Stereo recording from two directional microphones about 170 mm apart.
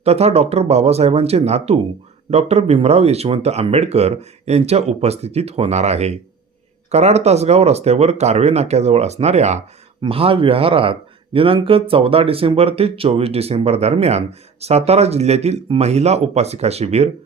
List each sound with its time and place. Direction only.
0.0 s speech: 40° right (ahead or behind)